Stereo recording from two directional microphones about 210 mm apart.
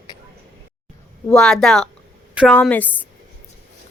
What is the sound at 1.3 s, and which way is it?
A woman's voice, centre (ahead or behind).